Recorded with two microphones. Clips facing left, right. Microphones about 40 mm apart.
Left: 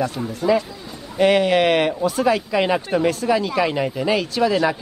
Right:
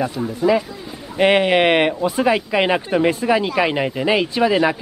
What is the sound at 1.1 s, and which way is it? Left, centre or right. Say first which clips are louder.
Speech: right 1 dB; right.